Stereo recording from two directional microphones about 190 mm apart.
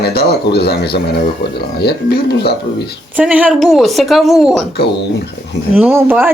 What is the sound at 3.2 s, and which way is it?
Speech, 5° right (ahead or behind).